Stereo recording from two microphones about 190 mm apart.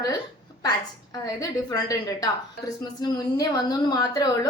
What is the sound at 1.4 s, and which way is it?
A woman's voice, 20° left (ahead or behind).